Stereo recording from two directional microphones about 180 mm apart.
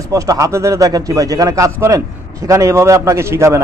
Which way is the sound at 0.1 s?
20° right (ahead or behind).